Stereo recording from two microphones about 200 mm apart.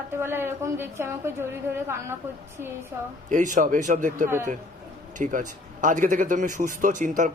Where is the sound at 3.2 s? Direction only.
40° right (ahead or behind).